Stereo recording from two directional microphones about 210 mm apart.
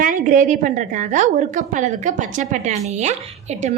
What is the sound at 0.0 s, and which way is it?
A woman's voice, 40° right (ahead or behind).